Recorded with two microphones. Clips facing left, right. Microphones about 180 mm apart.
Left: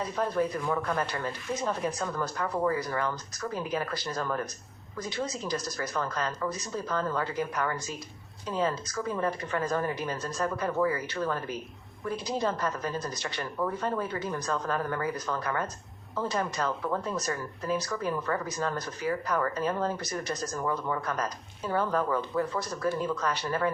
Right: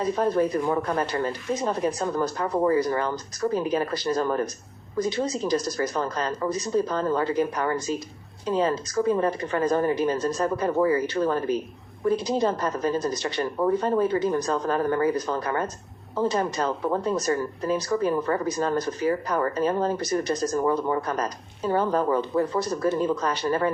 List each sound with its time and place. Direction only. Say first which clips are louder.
0.2 s a woman's voice: right 4 dB; 35° right (ahead or behind)